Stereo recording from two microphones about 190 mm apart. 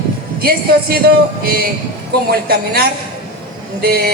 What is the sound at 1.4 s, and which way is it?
A man's voice, 55° right (ahead or behind).